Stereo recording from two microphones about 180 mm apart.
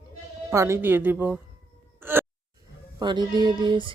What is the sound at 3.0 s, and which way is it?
Speech, 25° right (ahead or behind).